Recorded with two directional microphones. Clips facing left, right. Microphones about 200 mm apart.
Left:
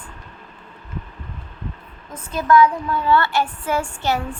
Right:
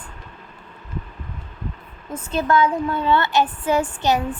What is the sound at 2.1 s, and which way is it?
A woman's voice, 25° right (ahead or behind).